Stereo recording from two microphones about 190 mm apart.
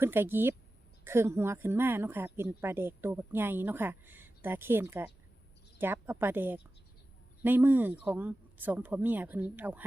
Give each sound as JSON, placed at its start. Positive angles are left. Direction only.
{"t": 0.0, "sound": "speech", "side_deg": -10}